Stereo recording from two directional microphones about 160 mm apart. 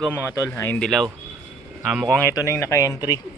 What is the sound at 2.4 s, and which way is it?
Speech, 15° left (ahead or behind).